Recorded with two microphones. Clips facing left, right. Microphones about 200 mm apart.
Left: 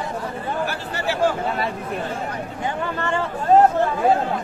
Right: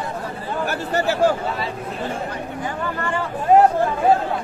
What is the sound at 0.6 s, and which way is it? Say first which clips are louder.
Speech: right 8 dB; 45° right (ahead or behind).